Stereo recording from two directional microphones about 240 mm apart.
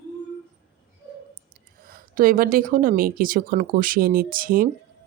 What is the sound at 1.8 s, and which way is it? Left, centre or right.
Speech, right.